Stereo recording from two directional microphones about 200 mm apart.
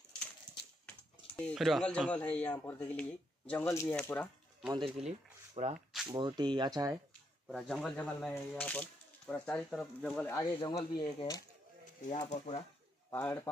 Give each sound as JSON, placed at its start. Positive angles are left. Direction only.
{"t": 1.3, "sound": "speech", "side_deg": 5}
{"t": 4.6, "sound": "speech", "side_deg": -5}
{"t": 4.8, "sound": "speech", "side_deg": -35}
{"t": 6.0, "sound": "speech", "side_deg": -20}
{"t": 7.4, "sound": "speech", "side_deg": 0}
{"t": 10.3, "sound": "speech", "side_deg": 20}
{"t": 12.1, "sound": "speech", "side_deg": 35}
{"t": 13.1, "sound": "speech", "side_deg": 10}